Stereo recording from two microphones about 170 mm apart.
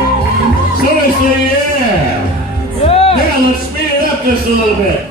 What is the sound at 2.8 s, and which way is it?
Music, 35° left (ahead or behind).